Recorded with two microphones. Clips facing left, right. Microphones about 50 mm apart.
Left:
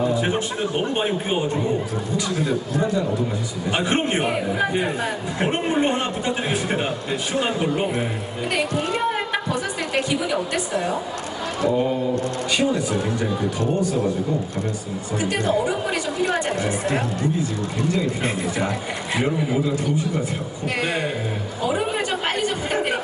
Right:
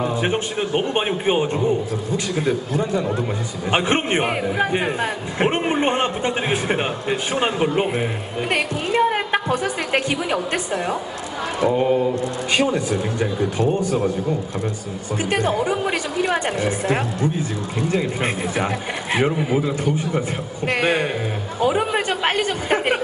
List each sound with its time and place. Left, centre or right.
0.0 s a man's voice: right
15.2 s a man's voice: right
21.6 s a sound: right